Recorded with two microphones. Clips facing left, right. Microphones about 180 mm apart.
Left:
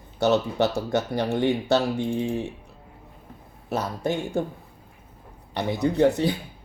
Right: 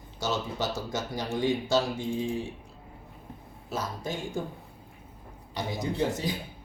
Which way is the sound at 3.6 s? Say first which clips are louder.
Left 7 dB; 65° left (ahead or behind).